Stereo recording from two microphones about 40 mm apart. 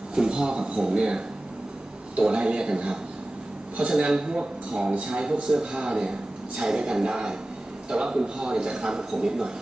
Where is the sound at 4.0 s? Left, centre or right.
Centre.